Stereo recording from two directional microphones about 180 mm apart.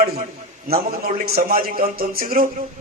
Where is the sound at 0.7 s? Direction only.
55° right (ahead or behind).